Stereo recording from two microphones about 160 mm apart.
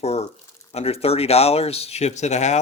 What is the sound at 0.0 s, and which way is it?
Speech, 40° left (ahead or behind).